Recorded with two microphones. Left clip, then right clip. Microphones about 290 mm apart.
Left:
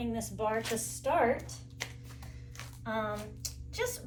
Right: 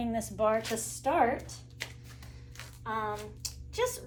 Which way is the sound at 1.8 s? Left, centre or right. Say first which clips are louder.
Even; centre.